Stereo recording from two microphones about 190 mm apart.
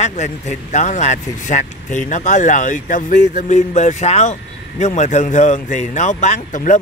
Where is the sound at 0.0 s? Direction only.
40° left (ahead or behind).